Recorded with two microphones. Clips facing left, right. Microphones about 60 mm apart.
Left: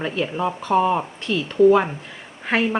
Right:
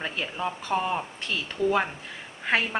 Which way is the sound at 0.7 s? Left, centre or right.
Centre.